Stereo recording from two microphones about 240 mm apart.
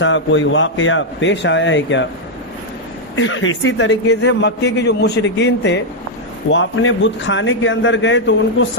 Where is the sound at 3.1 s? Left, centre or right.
Left.